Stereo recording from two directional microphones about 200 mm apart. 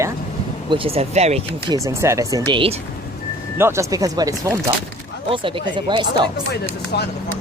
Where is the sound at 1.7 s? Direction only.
15° right (ahead or behind).